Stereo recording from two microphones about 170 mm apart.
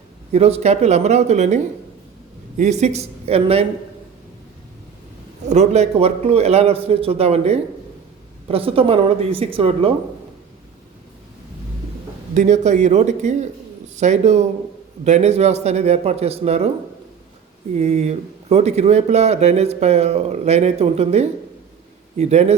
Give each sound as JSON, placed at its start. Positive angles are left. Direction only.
{"t": 0.3, "sound": "speech", "side_deg": -35}
{"t": 2.6, "sound": "speech", "side_deg": -40}
{"t": 5.5, "sound": "speech", "side_deg": -40}
{"t": 12.3, "sound": "speech", "side_deg": -45}
{"t": 17.7, "sound": "speech", "side_deg": -40}